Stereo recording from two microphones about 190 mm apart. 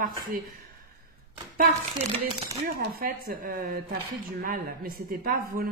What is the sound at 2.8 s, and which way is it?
Speech, 55° right (ahead or behind).